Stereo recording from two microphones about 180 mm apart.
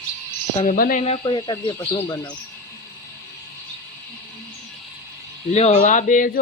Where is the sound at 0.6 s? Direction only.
50° left (ahead or behind).